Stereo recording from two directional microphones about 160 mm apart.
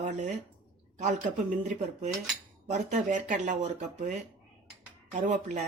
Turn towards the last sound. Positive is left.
turn(degrees=-50)  # may be behind; listen again after turning